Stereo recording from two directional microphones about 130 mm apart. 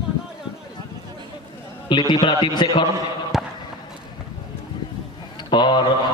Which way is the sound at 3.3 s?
Centre (ahead or behind).